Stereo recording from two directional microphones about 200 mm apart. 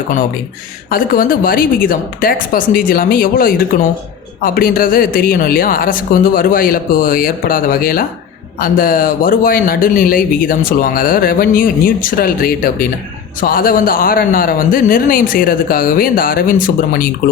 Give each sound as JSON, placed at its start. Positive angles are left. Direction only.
{"t": 0.9, "sound": "speech", "side_deg": 45}